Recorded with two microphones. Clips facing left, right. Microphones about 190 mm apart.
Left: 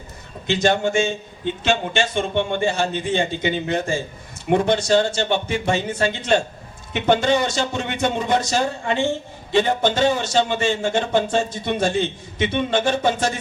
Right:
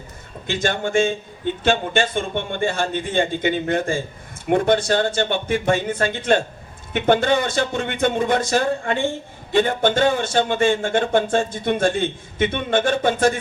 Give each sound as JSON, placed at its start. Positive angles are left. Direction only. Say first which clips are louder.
{"t": 0.4, "sound": "speech", "louder": "left 4 dB", "side_deg": -50}